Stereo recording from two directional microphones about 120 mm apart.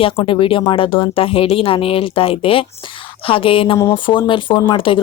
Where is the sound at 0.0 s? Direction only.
45° left (ahead or behind).